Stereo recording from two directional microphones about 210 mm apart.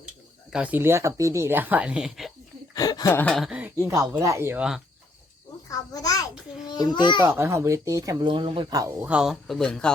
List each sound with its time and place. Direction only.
0.5 s speech: 5° right (ahead or behind)
2.7 s speech: 15° left (ahead or behind); by 4.8 s 5° right (ahead or behind)
5.6 s a sound: 15° left (ahead or behind)
6.7 s a child's voice: 20° left (ahead or behind)
7.2 s speech: 10° right (ahead or behind)
9.0 s speech: 5° right (ahead or behind)